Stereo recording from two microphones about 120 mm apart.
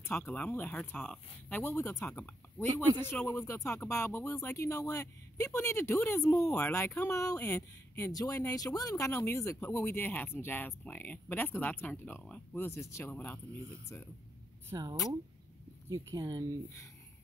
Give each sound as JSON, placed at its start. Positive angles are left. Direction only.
{"t": 0.0, "sound": "speech", "side_deg": 20}
{"t": 14.7, "sound": "speech", "side_deg": -30}
{"t": 15.9, "sound": "speech", "side_deg": -30}